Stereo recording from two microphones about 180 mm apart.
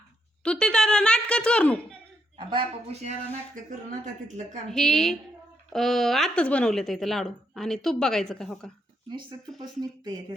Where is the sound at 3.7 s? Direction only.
45° right (ahead or behind).